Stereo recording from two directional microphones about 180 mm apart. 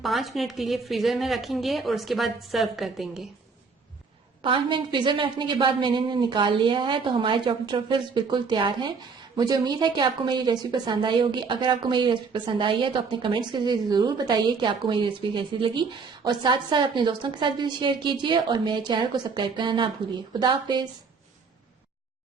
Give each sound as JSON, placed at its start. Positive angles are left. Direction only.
{"t": 0.0, "sound": "a woman's voice", "side_deg": 0}
{"t": 4.4, "sound": "a woman's voice", "side_deg": -25}